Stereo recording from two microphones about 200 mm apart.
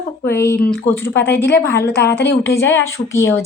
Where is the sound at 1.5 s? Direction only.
50° left (ahead or behind).